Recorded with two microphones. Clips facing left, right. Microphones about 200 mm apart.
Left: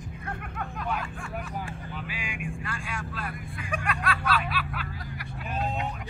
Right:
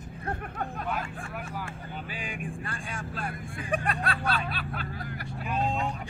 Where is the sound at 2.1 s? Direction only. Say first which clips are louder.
Even; 35° right (ahead or behind).